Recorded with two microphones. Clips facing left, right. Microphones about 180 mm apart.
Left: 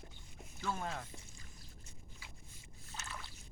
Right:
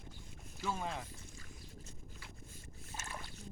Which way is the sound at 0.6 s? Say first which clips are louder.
Right 1 dB; 10° right (ahead or behind).